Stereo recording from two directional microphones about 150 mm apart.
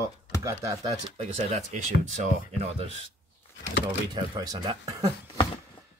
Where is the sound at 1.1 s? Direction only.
45° right (ahead or behind).